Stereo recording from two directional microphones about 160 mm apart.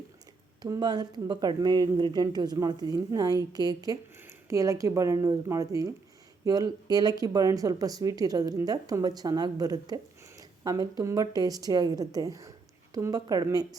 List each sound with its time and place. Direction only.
0.6 s speech: 25° right (ahead or behind)